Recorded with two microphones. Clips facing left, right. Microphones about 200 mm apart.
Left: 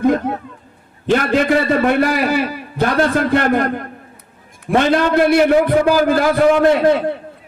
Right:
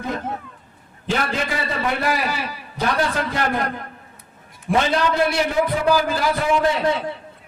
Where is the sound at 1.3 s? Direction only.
55° left (ahead or behind).